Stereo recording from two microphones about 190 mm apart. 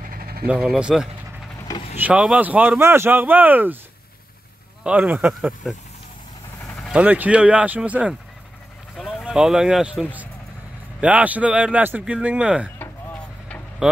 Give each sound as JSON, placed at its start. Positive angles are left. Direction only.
{"t": 0.0, "sound": "vehicle", "side_deg": -50}
{"t": 0.5, "sound": "speech", "side_deg": -5}
{"t": 4.8, "sound": "speech", "side_deg": -10}